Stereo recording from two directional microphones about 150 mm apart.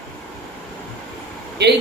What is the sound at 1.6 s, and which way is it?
Speech, 90° right.